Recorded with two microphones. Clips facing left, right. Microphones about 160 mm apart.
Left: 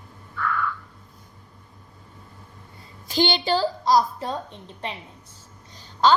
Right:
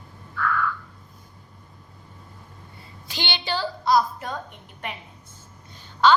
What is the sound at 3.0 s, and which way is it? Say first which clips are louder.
A woman's voice: left 8 dB; 45° left (ahead or behind).